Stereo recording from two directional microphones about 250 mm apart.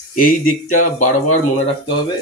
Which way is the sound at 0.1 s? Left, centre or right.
Left.